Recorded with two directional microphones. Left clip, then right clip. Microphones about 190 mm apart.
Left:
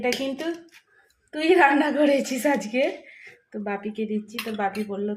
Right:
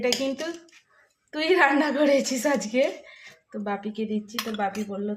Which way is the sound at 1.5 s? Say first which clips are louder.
Left 2 dB; 10° right (ahead or behind).